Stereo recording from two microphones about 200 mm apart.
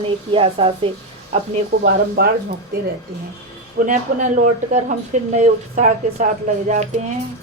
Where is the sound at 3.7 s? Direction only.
40° right (ahead or behind).